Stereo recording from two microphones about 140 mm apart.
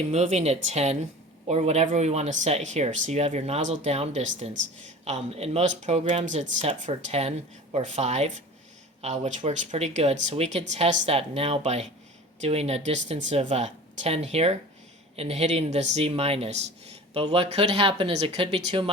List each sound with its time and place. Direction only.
0.1 s a man's voice: 50° right (ahead or behind)